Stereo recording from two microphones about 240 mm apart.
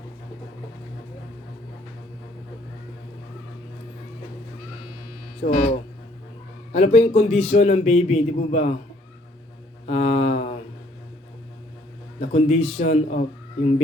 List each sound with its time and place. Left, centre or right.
5.4 s speech: left
6.7 s speech: left
9.8 s a sound: left
12.2 s speech: left